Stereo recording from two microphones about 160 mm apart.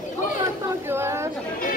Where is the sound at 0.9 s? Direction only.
15° right (ahead or behind).